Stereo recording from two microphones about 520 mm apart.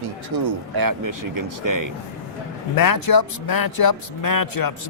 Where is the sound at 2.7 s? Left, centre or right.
Left.